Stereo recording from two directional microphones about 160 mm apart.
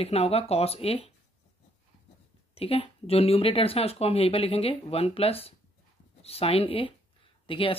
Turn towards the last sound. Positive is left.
turn(degrees=35)  # may be behind; listen again after turning